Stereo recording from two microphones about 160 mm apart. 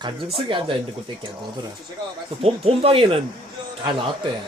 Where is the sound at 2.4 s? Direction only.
35° right (ahead or behind).